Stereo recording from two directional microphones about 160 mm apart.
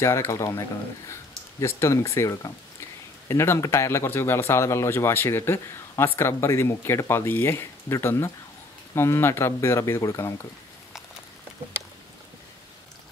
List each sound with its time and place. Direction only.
0.0 s speech: 15° left (ahead or behind)